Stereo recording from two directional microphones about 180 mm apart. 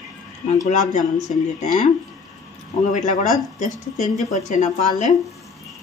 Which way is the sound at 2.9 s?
45° left (ahead or behind).